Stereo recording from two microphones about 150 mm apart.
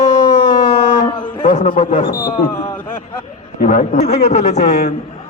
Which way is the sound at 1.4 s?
40° left (ahead or behind).